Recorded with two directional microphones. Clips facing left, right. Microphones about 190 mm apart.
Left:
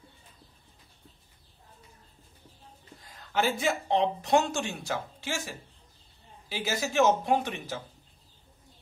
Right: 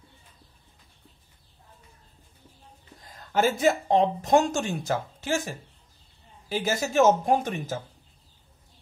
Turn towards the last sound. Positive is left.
turn(degrees=-45)  # may be behind; listen again after turning